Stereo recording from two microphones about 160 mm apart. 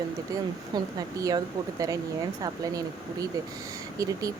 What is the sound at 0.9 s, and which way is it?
Speech, 25° right (ahead or behind).